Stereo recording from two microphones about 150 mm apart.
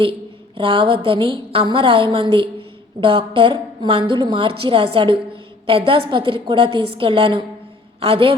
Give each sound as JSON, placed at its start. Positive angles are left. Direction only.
{"t": 0.0, "sound": "a woman's voice", "side_deg": -35}